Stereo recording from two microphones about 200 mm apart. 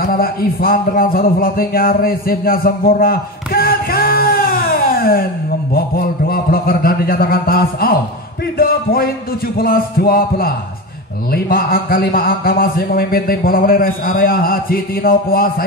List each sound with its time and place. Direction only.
0.0 s a man's voice: 45° left (ahead or behind)